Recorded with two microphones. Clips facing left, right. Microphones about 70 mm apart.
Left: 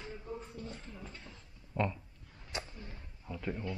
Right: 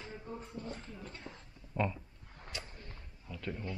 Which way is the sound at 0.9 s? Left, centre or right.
Centre.